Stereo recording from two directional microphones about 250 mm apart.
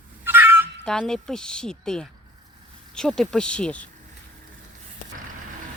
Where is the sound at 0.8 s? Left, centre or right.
Centre.